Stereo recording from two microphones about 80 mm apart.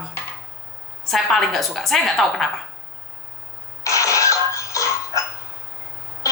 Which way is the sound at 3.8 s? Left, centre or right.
Left.